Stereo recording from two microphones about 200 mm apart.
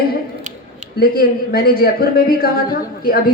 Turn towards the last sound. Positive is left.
turn(degrees=45)  # may be behind; listen again after turning